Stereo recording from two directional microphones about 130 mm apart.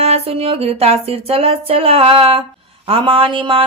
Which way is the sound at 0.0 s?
50° right (ahead or behind).